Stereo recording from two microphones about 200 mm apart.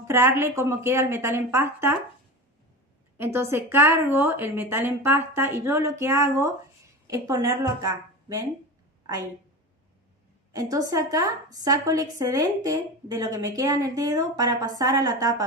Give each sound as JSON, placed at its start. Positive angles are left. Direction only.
{"t": 0.1, "sound": "a woman's voice", "side_deg": -10}
{"t": 3.2, "sound": "a woman's voice", "side_deg": -15}
{"t": 10.5, "sound": "a woman's voice", "side_deg": -15}